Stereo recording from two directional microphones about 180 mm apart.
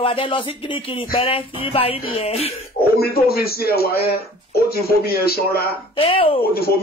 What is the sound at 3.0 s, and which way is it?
A man's voice, 60° left (ahead or behind).